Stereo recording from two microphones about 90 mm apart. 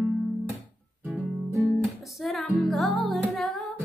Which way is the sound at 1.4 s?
30° right (ahead or behind).